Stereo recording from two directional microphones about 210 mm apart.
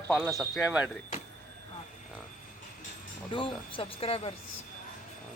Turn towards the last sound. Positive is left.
turn(degrees=25)  # may be behind; listen again after turning